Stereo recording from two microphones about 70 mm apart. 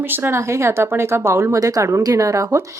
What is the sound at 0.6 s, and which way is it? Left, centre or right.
Speech, right.